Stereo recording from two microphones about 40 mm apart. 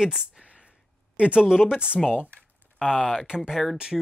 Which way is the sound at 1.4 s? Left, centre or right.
Centre.